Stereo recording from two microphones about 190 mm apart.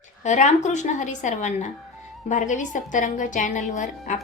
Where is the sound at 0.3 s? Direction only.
40° left (ahead or behind).